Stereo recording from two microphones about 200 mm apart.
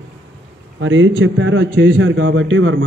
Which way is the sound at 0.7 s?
70° right (ahead or behind).